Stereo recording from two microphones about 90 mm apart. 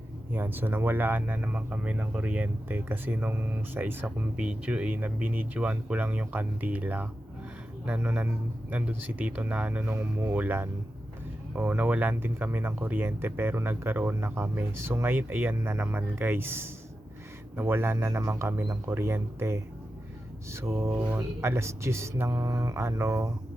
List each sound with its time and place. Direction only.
0.3 s speech: 25° right (ahead or behind)
17.9 s speech: 35° right (ahead or behind)